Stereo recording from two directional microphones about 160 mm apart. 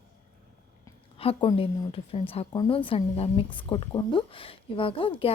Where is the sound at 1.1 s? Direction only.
35° left (ahead or behind).